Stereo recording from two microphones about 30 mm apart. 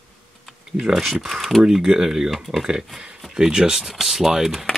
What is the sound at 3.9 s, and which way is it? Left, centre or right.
Speech, centre.